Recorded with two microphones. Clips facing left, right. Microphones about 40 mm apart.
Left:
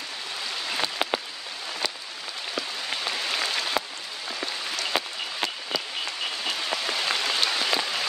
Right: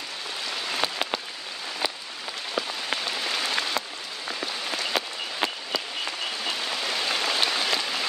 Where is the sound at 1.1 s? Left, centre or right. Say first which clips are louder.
Left 2 dB; centre.